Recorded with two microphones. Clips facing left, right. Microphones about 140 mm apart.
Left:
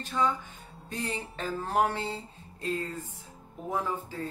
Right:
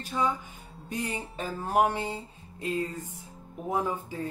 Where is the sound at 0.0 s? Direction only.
10° right (ahead or behind).